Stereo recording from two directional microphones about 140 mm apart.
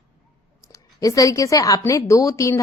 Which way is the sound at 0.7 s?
25° left (ahead or behind).